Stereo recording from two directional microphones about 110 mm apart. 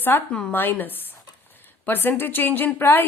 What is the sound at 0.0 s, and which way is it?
Speech, 20° left (ahead or behind).